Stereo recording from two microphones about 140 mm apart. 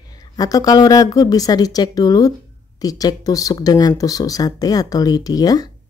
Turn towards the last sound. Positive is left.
turn(degrees=25)  # may be behind; listen again after turning